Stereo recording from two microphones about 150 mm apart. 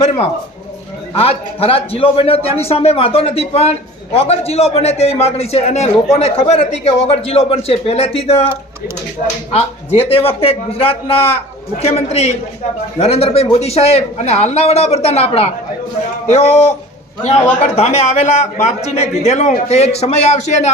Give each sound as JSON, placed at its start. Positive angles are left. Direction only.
{"t": 0.0, "sound": "a man's voice", "side_deg": 40}
{"t": 17.7, "sound": "a man's voice", "side_deg": 45}